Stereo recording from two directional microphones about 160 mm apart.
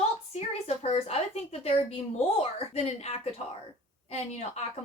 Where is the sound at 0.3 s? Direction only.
45° left (ahead or behind).